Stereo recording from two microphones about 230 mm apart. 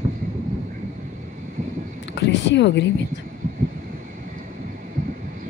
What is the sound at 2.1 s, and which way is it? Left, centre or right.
Speech, left.